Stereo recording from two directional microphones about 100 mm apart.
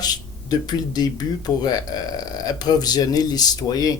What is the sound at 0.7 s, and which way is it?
Speech, 40° left (ahead or behind).